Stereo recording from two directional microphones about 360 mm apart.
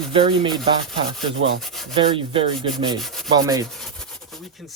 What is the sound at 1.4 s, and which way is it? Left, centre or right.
Rub, right.